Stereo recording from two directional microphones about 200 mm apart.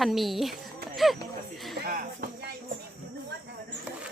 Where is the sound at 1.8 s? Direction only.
45° right (ahead or behind).